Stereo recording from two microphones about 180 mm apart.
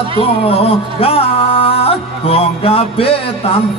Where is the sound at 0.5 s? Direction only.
35° left (ahead or behind).